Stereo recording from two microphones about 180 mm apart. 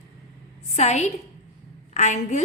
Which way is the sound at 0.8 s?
40° left (ahead or behind).